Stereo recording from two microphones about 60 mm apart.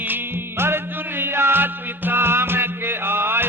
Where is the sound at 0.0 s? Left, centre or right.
Right.